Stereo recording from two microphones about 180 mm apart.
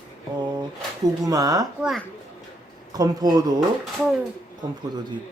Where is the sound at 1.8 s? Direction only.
Centre (ahead or behind).